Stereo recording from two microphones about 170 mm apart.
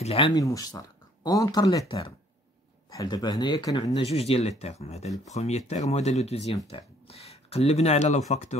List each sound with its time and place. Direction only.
0.0 s speech: 35° left (ahead or behind)
0.3 s speech: 20° left (ahead or behind); by 8.5 s 40° left (ahead or behind)